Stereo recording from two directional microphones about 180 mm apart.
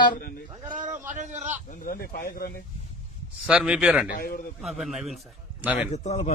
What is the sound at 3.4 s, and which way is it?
Speech, 5° right (ahead or behind).